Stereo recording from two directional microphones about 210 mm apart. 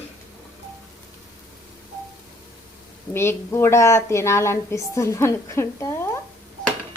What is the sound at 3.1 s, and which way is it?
A woman's voice, 10° left (ahead or behind).